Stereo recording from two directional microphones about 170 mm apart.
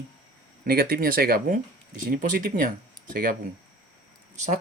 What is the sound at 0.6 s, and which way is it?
Speech, 60° right (ahead or behind).